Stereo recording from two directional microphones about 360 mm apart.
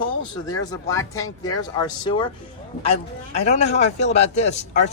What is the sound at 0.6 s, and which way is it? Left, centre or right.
Speech, centre.